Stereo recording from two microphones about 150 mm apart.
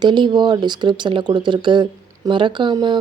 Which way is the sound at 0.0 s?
30° right (ahead or behind).